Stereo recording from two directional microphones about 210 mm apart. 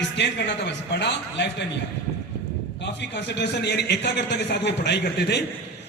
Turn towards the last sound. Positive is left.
turn(degrees=50)  # may be behind; listen again after turning